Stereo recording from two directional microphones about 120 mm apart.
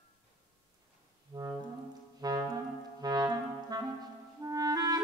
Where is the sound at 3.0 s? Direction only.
35° right (ahead or behind).